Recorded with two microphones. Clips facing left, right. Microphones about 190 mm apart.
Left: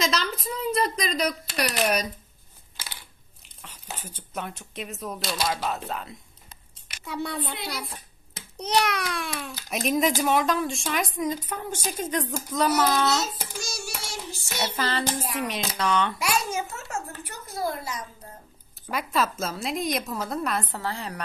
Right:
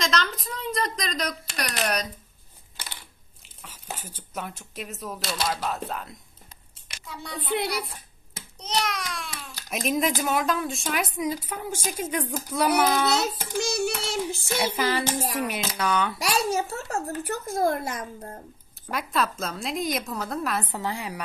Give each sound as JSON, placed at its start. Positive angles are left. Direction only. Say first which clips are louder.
{"t": 0.0, "sound": "speech", "louder": "even", "side_deg": 5}
{"t": 4.0, "sound": "speech", "louder": "left 3 dB", "side_deg": 0}
{"t": 7.4, "sound": "child singing", "louder": "right 7 dB", "side_deg": -65}
{"t": 8.5, "sound": "a child's voice", "louder": "left 4 dB", "side_deg": 60}
{"t": 9.7, "sound": "a woman's voice", "louder": "left 1 dB", "side_deg": 0}
{"t": 13.2, "sound": "child singing", "louder": "right 5 dB", "side_deg": -65}
{"t": 14.8, "sound": "a woman's voice", "louder": "right 2 dB", "side_deg": -10}
{"t": 16.2, "sound": "a child's voice", "louder": "right 2 dB", "side_deg": -35}
{"t": 18.9, "sound": "speech", "louder": "left 1 dB", "side_deg": 0}
{"t": 20.7, "sound": "a woman's voice", "louder": "right 1 dB", "side_deg": -15}